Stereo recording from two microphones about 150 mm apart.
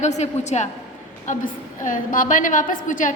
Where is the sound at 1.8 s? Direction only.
65° left (ahead or behind).